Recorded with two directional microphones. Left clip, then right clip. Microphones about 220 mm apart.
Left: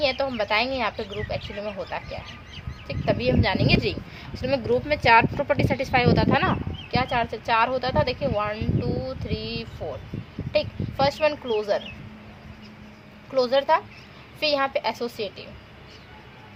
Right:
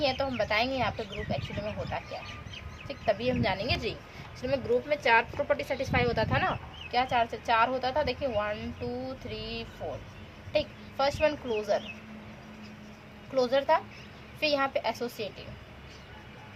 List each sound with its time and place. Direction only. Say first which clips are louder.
0.0 s speech: left 5 dB; 35° left (ahead or behind)
13.3 s speech: left 5 dB; 35° left (ahead or behind)